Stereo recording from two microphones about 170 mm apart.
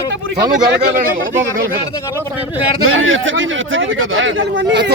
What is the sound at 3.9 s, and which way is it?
Speech, 90° right.